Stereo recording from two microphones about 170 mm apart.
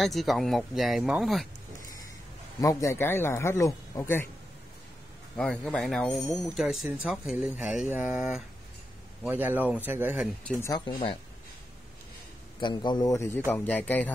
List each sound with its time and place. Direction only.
0.0 s speech: centre (ahead or behind)
2.6 s speech: 20° left (ahead or behind)
5.3 s speech: 5° left (ahead or behind)
10.6 s a man's voice: 25° left (ahead or behind)
12.5 s a man's voice: 25° left (ahead or behind); by 14.1 s 10° left (ahead or behind)